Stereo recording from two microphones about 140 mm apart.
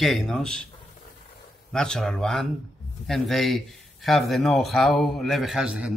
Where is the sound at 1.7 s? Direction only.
5° left (ahead or behind).